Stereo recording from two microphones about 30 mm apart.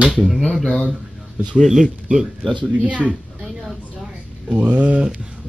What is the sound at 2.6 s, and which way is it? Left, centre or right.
Speech, right.